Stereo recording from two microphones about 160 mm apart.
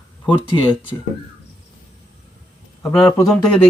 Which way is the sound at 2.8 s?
15° left (ahead or behind).